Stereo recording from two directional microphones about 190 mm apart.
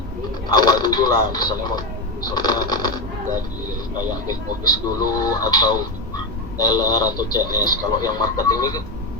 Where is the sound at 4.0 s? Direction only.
20° left (ahead or behind).